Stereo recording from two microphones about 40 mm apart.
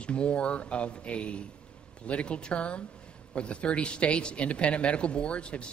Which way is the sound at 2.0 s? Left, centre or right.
Left.